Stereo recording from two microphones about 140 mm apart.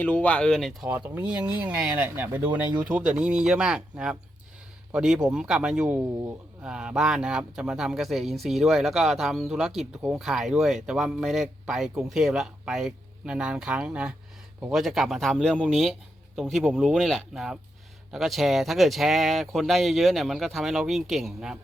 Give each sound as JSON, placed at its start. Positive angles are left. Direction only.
{"t": 0.0, "sound": "speech", "side_deg": 10}
{"t": 0.9, "sound": "speech", "side_deg": -15}